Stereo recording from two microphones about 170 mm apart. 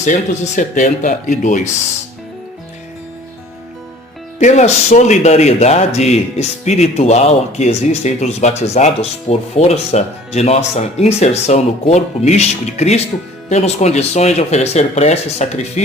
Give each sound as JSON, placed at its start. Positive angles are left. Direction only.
{"t": 0.0, "sound": "speech", "side_deg": 45}
{"t": 4.4, "sound": "speech", "side_deg": 45}